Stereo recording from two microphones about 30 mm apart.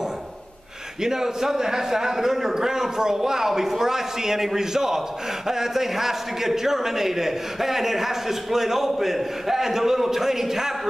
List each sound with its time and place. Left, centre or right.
1.0 s a man's voice: centre